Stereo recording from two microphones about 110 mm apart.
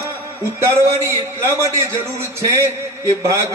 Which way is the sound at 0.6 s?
25° right (ahead or behind).